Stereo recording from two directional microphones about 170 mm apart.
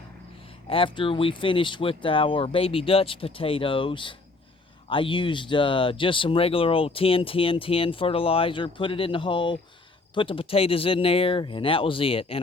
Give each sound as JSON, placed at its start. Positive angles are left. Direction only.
{"t": 0.7, "sound": "speech", "side_deg": 30}